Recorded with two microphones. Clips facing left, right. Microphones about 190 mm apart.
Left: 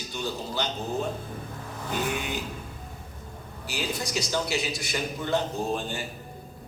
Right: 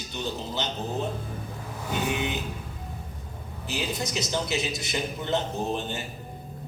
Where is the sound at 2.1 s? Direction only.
20° right (ahead or behind).